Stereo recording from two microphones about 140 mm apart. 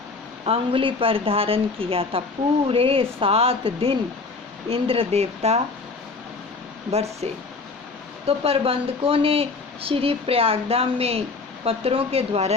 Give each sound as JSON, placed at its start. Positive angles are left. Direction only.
{"t": 0.4, "sound": "a woman's voice", "side_deg": -40}
{"t": 6.9, "sound": "speech", "side_deg": -50}
{"t": 8.3, "sound": "speech", "side_deg": -45}